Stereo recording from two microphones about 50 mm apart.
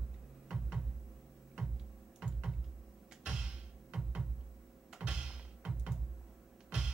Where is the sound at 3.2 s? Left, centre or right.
Centre.